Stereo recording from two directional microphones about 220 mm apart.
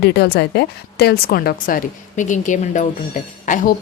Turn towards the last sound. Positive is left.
turn(degrees=35)  # may be behind; listen again after turning